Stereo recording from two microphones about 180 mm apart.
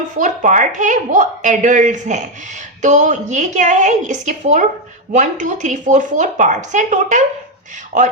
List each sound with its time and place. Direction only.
0.2 s a woman's voice: 45° right (ahead or behind)